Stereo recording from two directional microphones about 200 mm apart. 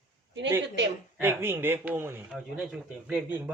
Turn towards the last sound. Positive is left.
turn(degrees=-5)  # may be behind; listen again after turning